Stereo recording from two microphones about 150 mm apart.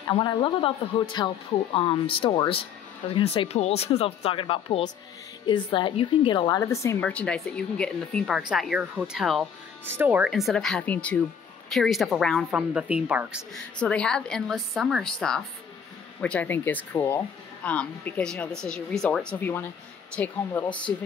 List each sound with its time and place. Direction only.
0.0 s a woman's voice: 30° left (ahead or behind)
7.1 s speech: 10° left (ahead or behind)
9.8 s speech: 10° right (ahead or behind)
13.7 s speech: 5° left (ahead or behind)